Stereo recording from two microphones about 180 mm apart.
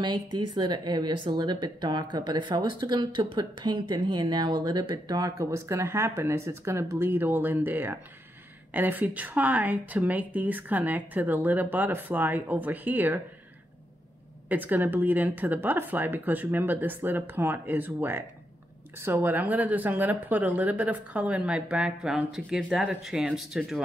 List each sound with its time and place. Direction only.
0.6 s a woman's voice: 25° right (ahead or behind)
14.5 s speech: 10° right (ahead or behind)